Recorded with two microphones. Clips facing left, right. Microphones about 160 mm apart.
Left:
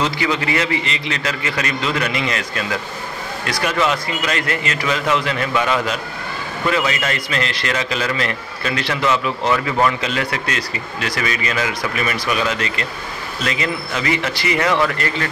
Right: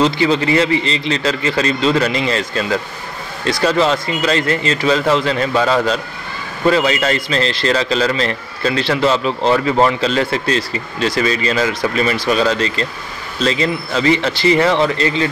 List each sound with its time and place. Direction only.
0.0 s a man's voice: 30° right (ahead or behind)